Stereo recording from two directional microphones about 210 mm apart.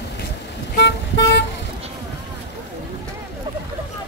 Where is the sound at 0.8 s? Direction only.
55° left (ahead or behind).